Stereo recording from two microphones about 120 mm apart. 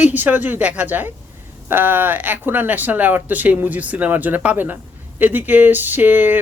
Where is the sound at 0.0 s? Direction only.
15° right (ahead or behind).